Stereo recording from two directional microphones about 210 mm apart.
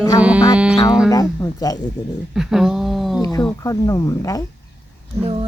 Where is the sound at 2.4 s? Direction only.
Centre (ahead or behind).